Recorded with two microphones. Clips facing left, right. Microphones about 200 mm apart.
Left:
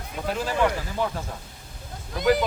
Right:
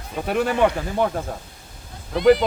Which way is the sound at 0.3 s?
65° right (ahead or behind).